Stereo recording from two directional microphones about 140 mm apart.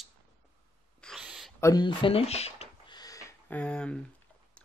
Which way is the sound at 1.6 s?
25° left (ahead or behind).